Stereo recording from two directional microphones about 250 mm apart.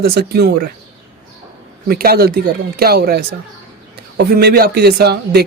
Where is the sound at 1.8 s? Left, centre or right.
Right.